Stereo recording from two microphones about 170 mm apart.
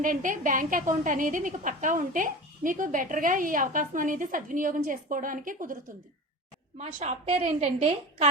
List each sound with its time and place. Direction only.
0.0 s a woman's voice: 50° right (ahead or behind)
6.7 s a woman's voice: 40° right (ahead or behind)